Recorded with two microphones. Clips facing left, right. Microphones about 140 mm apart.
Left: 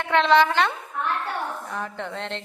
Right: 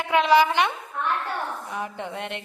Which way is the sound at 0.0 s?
10° right (ahead or behind).